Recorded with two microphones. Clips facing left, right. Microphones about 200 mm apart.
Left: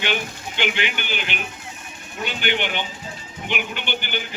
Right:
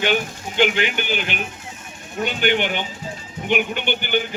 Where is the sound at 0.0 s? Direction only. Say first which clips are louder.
Right 5 dB; 45° right (ahead or behind).